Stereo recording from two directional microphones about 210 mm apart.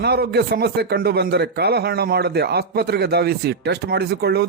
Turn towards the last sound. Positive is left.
turn(degrees=-50)  # may be behind; listen again after turning